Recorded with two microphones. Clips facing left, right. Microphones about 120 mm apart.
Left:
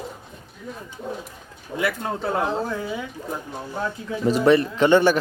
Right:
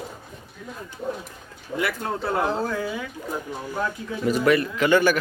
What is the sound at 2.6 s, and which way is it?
Speech, 25° left (ahead or behind).